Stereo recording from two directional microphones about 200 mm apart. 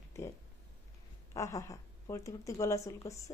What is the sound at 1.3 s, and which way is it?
A woman's voice, 15° left (ahead or behind).